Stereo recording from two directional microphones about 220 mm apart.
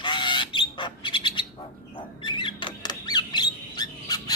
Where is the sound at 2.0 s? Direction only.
20° left (ahead or behind).